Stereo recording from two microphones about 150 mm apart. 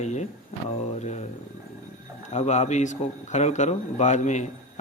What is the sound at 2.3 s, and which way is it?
Speech, 50° left (ahead or behind).